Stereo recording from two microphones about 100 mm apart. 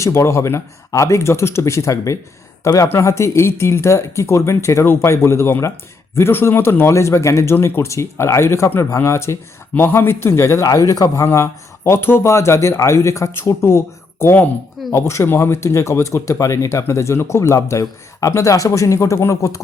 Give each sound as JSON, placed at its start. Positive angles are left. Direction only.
{"t": 0.0, "sound": "speech", "side_deg": 25}